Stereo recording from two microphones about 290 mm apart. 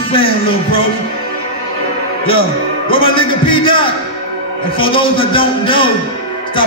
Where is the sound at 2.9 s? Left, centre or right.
Centre.